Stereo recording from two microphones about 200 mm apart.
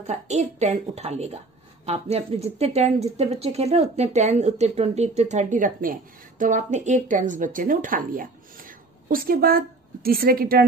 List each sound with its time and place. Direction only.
0.0 s a woman's voice: 35° right (ahead or behind)